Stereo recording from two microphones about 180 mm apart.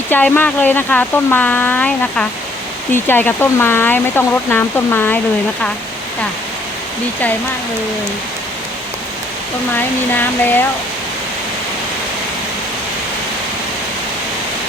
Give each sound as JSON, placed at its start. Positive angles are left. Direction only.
{"t": 0.1, "sound": "speech", "side_deg": 10}
{"t": 9.7, "sound": "speech", "side_deg": 10}